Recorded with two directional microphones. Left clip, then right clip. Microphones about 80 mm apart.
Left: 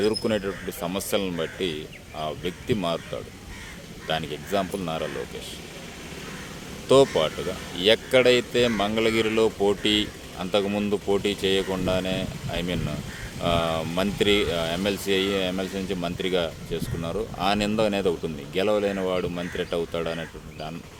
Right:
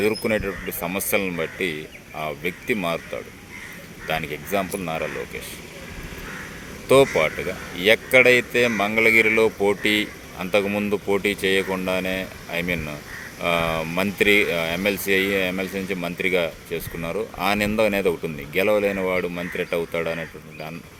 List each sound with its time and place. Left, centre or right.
0.2 s speech: centre
4.0 s speech: centre
6.8 s speech: centre
10.7 s speech: left
11.1 s speech: centre